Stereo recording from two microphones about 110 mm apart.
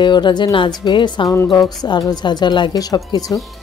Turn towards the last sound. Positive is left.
turn(degrees=35)  # may be behind; listen again after turning